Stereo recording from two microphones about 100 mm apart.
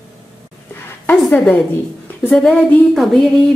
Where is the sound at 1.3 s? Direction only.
15° left (ahead or behind).